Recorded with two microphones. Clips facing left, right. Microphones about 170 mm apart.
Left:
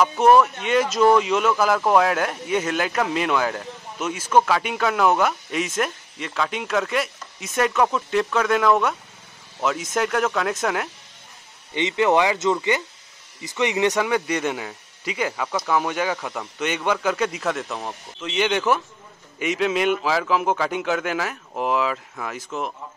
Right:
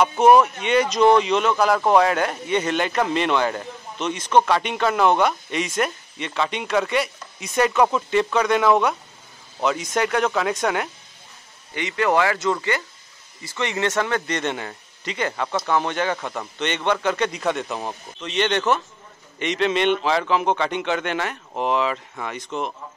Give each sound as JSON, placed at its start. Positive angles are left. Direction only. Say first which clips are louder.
{"t": 0.4, "sound": "speech", "louder": "even", "side_deg": 0}
{"t": 11.7, "sound": "speech", "louder": "left 2 dB", "side_deg": 20}